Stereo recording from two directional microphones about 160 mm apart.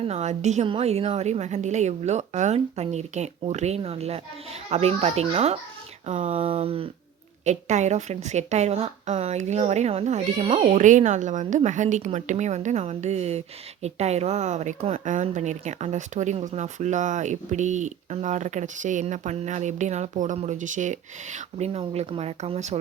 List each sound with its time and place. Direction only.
0.0 s a woman's voice: 40° right (ahead or behind)
6.1 s a woman's voice: 50° right (ahead or behind)
6.3 s speech: 35° right (ahead or behind)
7.4 s a woman's voice: 45° right (ahead or behind)
10.6 s a woman's voice: 50° right (ahead or behind)